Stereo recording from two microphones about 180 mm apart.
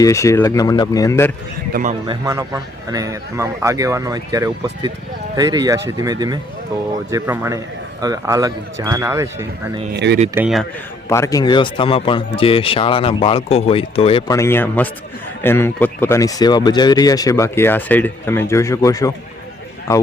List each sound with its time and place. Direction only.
0.0 s speech: 15° left (ahead or behind)
1.7 s a man's voice: 45° right (ahead or behind)
2.0 s speech: 15° right (ahead or behind)
9.9 s speech: 70° right (ahead or behind)
11.1 s speech: 15° left (ahead or behind)
14.3 s speech: 15° left (ahead or behind)